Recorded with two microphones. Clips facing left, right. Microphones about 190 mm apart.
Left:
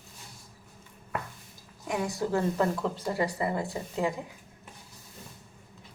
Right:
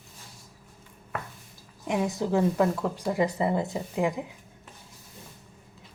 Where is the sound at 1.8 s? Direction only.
20° right (ahead or behind).